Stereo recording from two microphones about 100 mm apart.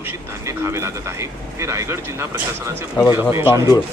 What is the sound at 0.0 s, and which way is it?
Speech, 25° right (ahead or behind).